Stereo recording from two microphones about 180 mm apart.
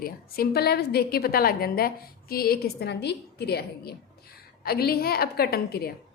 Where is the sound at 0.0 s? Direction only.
60° left (ahead or behind).